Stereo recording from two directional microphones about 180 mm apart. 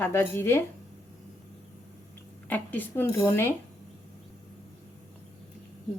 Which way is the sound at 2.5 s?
10° left (ahead or behind).